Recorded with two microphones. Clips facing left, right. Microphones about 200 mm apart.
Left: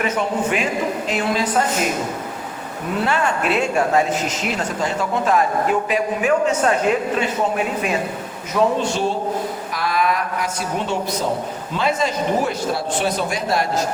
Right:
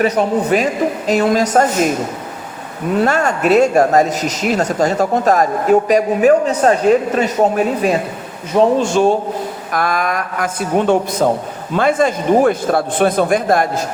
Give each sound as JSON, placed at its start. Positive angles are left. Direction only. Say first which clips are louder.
{"t": 0.0, "sound": "speech", "louder": "right 6 dB", "side_deg": -40}
{"t": 3.0, "sound": "speech", "louder": "right 5 dB", "side_deg": -45}
{"t": 8.8, "sound": "a man's voice", "louder": "right 7 dB", "side_deg": -50}